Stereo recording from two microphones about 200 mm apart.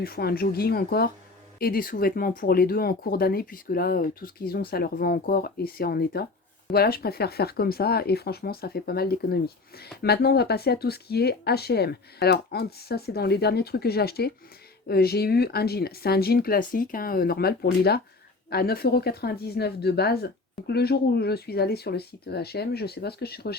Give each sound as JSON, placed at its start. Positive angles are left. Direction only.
{"t": 0.0, "sound": "speech", "side_deg": 50}